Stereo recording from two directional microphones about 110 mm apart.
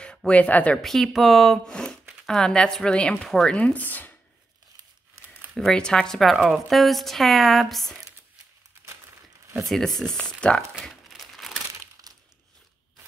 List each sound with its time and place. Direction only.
0.0 s speech: 10° left (ahead or behind)
0.8 s a woman's voice: centre (ahead or behind)
5.6 s a woman's voice: 5° left (ahead or behind)
9.6 s speech: 5° left (ahead or behind)
12.1 s a sound: 35° right (ahead or behind)